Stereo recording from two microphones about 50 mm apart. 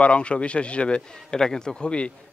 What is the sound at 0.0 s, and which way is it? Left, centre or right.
A man's voice, left.